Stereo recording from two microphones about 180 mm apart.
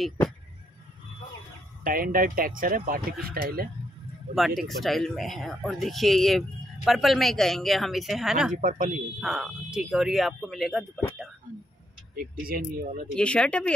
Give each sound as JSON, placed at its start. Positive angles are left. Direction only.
{"t": 1.9, "sound": "speech", "side_deg": -50}
{"t": 4.4, "sound": "speech", "side_deg": 0}
{"t": 8.5, "sound": "speech", "side_deg": -45}
{"t": 9.2, "sound": "speech", "side_deg": -5}
{"t": 12.2, "sound": "speech", "side_deg": -55}
{"t": 13.1, "sound": "speech", "side_deg": 5}